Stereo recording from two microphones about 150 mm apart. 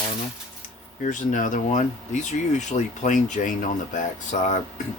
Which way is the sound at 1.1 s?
60° left (ahead or behind).